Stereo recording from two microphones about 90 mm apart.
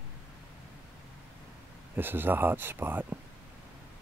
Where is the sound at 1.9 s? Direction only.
25° right (ahead or behind).